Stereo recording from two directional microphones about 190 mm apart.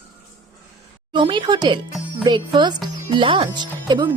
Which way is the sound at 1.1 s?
25° right (ahead or behind).